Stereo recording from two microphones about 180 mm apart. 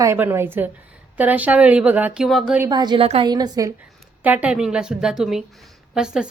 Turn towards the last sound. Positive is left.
turn(degrees=-5)  # may be behind; listen again after turning